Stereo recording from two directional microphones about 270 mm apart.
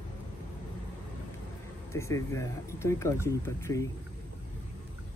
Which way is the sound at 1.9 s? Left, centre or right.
Centre.